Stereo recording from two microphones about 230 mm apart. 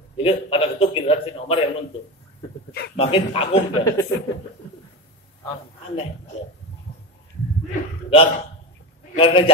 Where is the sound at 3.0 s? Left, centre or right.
Left.